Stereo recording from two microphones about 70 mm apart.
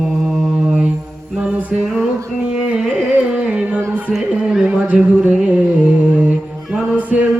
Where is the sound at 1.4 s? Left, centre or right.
Centre.